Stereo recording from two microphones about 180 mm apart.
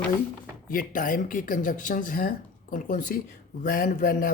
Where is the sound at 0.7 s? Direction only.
50° left (ahead or behind).